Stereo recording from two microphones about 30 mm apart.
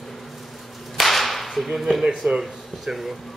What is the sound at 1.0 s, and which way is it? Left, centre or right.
Whip, centre.